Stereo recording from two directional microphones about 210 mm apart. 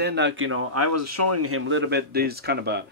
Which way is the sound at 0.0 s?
55° right (ahead or behind).